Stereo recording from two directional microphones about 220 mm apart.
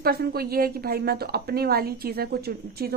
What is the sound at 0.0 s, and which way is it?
A woman's voice, 45° right (ahead or behind).